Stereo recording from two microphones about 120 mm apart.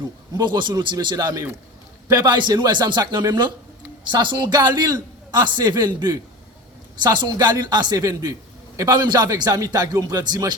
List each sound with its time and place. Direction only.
0.3 s a man's voice: 40° right (ahead or behind)